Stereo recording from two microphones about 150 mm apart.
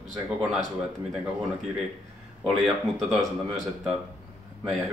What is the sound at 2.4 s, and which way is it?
Speech, 5° left (ahead or behind).